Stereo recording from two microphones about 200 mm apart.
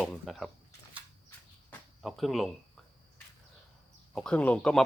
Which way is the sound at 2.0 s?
Centre (ahead or behind).